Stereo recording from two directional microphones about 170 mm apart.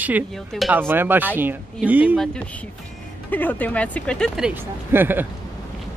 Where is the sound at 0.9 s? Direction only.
10° right (ahead or behind).